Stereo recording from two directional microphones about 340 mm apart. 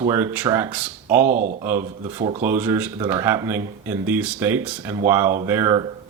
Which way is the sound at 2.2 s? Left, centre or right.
Centre.